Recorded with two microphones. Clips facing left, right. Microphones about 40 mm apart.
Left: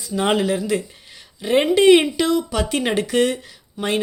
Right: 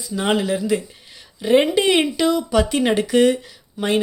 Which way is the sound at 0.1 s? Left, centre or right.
Centre.